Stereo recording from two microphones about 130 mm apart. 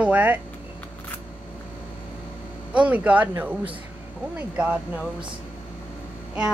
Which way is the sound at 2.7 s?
10° right (ahead or behind).